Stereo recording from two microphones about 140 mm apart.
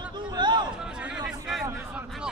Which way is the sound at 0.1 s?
30° right (ahead or behind).